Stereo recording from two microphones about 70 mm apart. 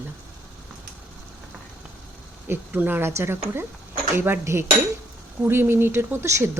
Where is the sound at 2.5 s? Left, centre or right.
Right.